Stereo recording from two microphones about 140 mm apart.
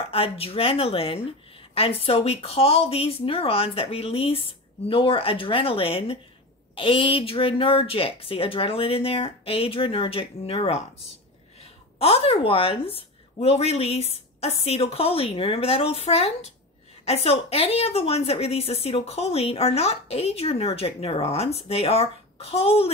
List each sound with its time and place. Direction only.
0.1 s a woman's voice: 45° left (ahead or behind)
12.0 s a woman's voice: 45° left (ahead or behind)